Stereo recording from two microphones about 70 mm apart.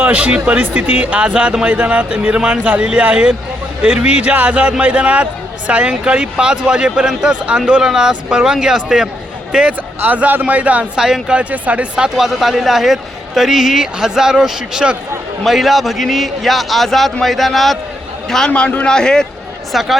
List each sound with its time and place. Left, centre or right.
0.0 s speech: centre
10.0 s a man's voice: right; by 19.2 s centre
19.7 s a man's voice: centre